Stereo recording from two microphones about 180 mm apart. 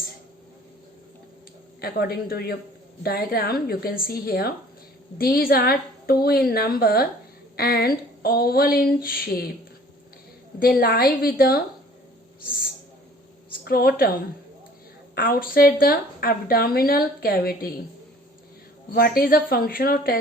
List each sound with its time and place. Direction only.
1.8 s a woman's voice: 60° left (ahead or behind)
10.6 s a woman's voice: 55° left (ahead or behind)
13.5 s a woman's voice: 55° left (ahead or behind)
15.1 s a woman's voice: 55° left (ahead or behind)
18.9 s a woman's voice: 55° left (ahead or behind)